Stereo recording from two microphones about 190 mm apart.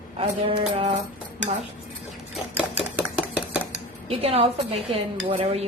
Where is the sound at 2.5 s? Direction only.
5° right (ahead or behind).